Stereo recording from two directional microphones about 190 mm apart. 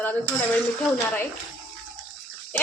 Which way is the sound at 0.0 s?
10° left (ahead or behind).